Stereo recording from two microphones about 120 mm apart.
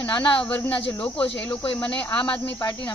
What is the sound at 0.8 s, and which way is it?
Speech, 45° left (ahead or behind).